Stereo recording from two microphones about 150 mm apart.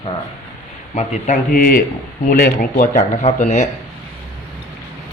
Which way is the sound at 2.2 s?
80° left.